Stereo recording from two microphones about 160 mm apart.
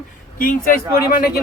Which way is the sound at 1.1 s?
65° left (ahead or behind).